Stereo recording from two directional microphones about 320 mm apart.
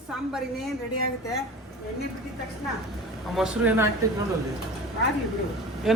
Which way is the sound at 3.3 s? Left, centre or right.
Centre.